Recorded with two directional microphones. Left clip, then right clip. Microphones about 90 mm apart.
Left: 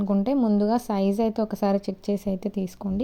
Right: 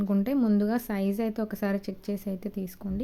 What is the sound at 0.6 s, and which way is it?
Speech, 20° left (ahead or behind).